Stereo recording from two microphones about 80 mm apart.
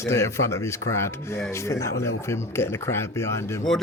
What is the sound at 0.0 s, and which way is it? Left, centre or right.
Speech, left.